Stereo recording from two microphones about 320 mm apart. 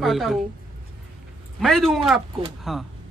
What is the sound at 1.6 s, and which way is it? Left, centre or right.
Speech, centre.